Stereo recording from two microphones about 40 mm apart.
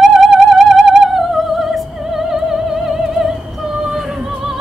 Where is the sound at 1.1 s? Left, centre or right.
Centre.